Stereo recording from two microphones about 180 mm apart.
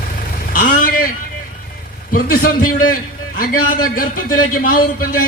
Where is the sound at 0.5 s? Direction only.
50° left (ahead or behind).